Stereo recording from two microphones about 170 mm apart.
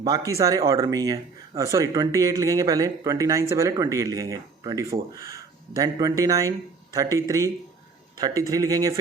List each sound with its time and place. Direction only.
0.3 s speech: 20° right (ahead or behind)